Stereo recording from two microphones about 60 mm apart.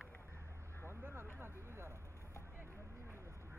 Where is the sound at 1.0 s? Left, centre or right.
Right.